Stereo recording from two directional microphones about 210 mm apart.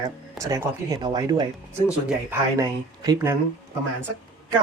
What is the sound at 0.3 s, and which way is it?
Speech, 15° right (ahead or behind).